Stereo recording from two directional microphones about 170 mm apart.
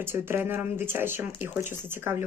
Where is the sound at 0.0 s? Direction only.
15° right (ahead or behind).